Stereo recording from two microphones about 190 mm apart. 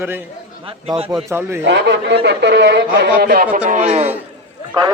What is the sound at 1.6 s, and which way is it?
A man's voice, 70° right (ahead or behind).